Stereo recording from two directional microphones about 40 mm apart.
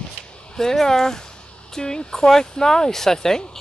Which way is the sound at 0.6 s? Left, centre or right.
Centre.